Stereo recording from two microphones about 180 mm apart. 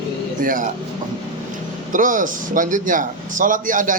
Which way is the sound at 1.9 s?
45° right (ahead or behind).